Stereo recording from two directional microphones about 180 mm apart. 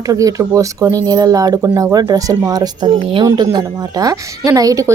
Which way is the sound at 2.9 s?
30° right (ahead or behind).